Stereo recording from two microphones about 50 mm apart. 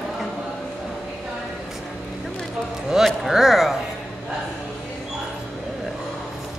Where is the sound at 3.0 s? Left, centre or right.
Centre.